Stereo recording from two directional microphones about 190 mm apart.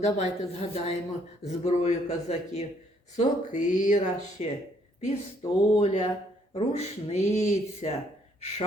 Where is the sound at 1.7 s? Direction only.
35° left (ahead or behind).